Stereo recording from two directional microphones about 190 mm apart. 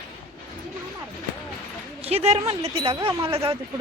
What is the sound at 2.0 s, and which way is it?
Speech, 35° right (ahead or behind).